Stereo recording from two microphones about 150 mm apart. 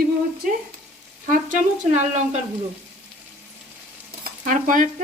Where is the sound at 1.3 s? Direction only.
55° right (ahead or behind).